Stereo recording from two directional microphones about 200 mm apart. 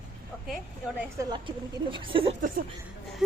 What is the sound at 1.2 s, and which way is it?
Speech, 20° right (ahead or behind).